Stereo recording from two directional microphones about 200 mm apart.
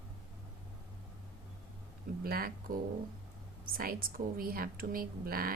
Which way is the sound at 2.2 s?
50° right (ahead or behind).